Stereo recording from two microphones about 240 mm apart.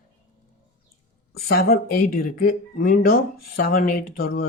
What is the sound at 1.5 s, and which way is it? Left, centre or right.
Speech, left.